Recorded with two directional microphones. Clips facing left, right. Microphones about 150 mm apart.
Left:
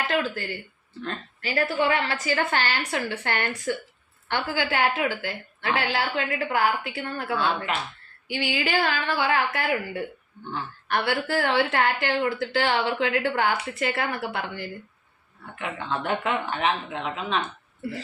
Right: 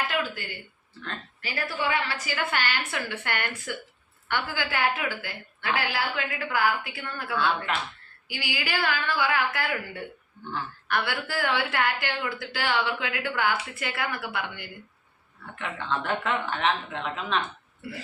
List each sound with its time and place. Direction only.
0.1 s a sound: 35° left (ahead or behind)
1.5 s a woman's voice: 40° left (ahead or behind)
4.5 s a woman's voice: 25° left (ahead or behind)
15.5 s a woman's voice: 10° left (ahead or behind)